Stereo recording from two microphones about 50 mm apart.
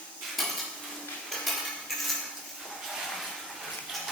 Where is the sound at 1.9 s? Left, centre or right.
Centre.